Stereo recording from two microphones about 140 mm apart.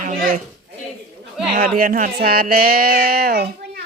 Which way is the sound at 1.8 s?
75° right (ahead or behind).